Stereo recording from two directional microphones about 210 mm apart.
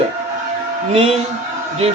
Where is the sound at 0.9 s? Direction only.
25° right (ahead or behind).